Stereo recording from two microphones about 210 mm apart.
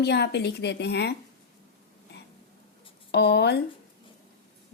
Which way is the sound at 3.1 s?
50° left (ahead or behind).